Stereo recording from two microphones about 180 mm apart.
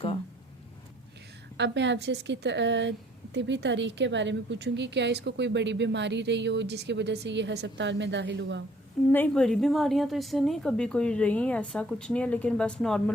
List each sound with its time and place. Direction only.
1.5 s a woman's voice: 75° right (ahead or behind)
9.1 s a woman's voice: 5° left (ahead or behind)